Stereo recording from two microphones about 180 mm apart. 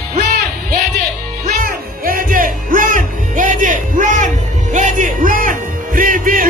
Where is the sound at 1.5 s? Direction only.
50° right (ahead or behind).